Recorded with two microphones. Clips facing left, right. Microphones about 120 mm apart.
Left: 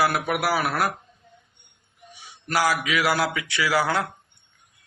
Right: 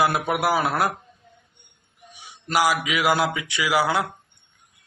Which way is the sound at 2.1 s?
15° right (ahead or behind).